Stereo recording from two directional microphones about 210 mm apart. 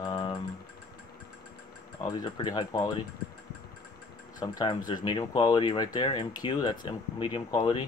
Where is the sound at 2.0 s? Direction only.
20° left (ahead or behind).